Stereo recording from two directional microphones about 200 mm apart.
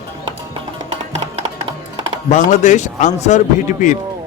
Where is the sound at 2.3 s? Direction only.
40° left (ahead or behind).